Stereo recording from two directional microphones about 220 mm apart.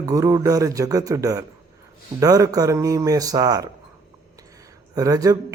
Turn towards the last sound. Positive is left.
turn(degrees=-15)  # may be behind; listen again after turning